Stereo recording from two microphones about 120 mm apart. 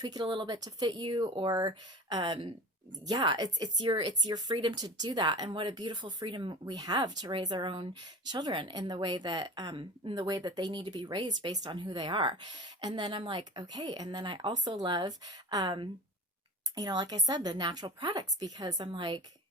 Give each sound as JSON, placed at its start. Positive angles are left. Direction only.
{"t": 0.0, "sound": "speech", "side_deg": -40}